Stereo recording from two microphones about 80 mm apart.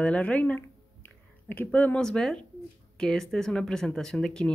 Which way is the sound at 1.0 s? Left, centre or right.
Left.